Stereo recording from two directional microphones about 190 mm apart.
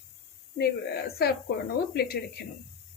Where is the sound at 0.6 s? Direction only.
55° left (ahead or behind).